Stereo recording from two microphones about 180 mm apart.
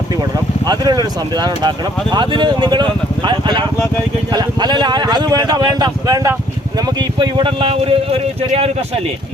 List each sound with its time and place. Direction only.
0.1 s speech: 20° right (ahead or behind)